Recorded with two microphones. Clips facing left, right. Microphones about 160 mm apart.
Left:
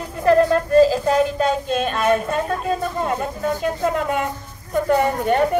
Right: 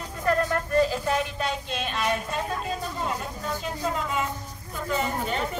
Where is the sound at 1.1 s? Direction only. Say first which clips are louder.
Left 9 dB; 40° left (ahead or behind); by 5.5 s 60° left (ahead or behind).